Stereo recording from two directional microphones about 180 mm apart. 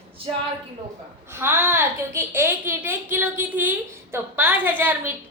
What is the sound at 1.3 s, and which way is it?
A woman's voice, 10° right (ahead or behind).